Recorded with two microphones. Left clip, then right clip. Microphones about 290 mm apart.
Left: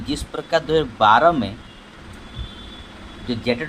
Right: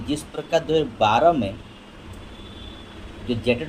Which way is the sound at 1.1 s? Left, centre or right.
Left.